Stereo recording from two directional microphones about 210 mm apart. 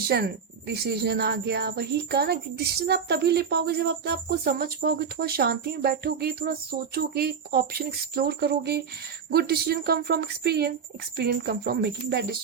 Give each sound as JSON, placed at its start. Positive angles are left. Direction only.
{"t": 0.1, "sound": "speech", "side_deg": -50}